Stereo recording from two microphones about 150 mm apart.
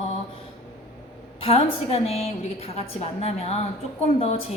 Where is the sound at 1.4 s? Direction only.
40° left (ahead or behind).